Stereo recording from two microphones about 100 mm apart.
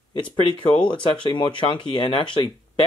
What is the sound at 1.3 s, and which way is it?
Speech, 55° left (ahead or behind).